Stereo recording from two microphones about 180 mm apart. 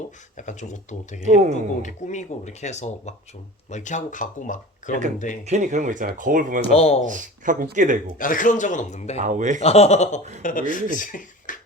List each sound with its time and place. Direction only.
0.3 s speech: 45° left (ahead or behind)
1.2 s a man's voice: 40° right (ahead or behind)
1.8 s speech: 40° left (ahead or behind)
5.5 s speech: 45° right (ahead or behind)
6.6 s speech: 35° left (ahead or behind)
7.0 s speech: 45° right (ahead or behind)
8.2 s speech: 50° left (ahead or behind)
9.1 s speech: 40° right (ahead or behind)
9.6 s speech: 35° left (ahead or behind)